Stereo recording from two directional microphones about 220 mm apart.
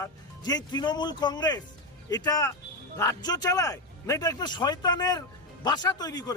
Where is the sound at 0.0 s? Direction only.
15° left (ahead or behind).